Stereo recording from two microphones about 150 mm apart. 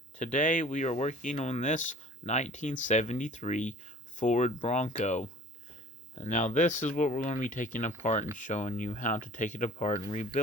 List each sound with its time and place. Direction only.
0.2 s speech: 55° left (ahead or behind)